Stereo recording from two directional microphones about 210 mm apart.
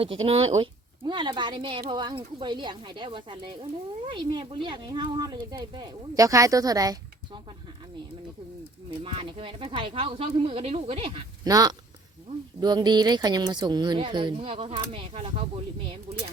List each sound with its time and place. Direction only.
0.3 s speech: 30° right (ahead or behind)
9.0 s speech: 25° right (ahead or behind)